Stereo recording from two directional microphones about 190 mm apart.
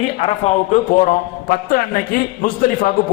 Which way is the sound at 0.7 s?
45° left (ahead or behind).